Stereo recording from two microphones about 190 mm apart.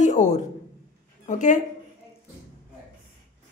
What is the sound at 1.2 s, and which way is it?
Speech, 40° left (ahead or behind).